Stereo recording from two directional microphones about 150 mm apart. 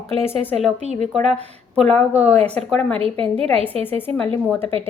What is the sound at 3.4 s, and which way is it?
Speech, 40° right (ahead or behind).